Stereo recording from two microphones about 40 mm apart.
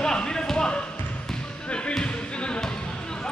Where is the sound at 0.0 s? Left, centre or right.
Centre.